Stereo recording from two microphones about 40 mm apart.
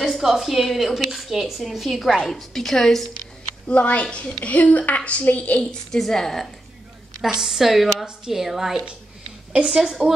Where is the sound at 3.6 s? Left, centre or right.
Left.